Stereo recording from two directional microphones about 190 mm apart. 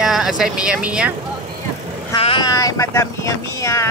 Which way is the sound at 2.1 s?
25° left (ahead or behind).